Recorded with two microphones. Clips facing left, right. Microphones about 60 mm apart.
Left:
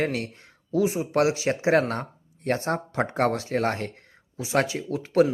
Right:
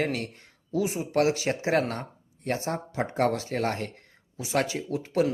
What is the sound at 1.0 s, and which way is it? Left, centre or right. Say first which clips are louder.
Speech: left 2 dB; left.